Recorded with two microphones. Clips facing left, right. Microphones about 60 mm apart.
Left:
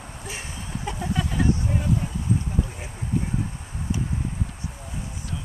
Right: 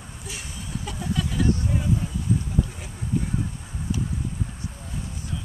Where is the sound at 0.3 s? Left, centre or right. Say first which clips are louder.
Even; left.